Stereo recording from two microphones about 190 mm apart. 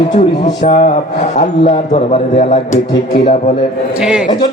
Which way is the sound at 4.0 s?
5° right (ahead or behind).